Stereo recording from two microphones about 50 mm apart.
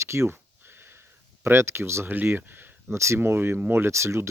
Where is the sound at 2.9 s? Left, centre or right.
Right.